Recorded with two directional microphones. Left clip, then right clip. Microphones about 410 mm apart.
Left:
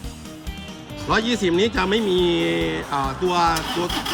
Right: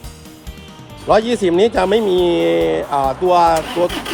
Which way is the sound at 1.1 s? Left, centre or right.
Centre.